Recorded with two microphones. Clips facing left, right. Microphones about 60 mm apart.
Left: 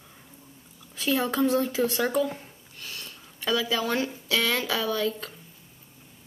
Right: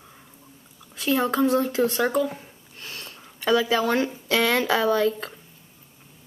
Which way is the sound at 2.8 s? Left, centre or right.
Right.